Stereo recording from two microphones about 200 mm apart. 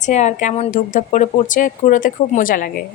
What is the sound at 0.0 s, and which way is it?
Speech, 35° left (ahead or behind).